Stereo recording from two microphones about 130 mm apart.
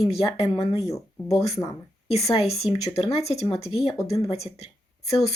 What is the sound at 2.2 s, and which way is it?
Speech, 55° left (ahead or behind).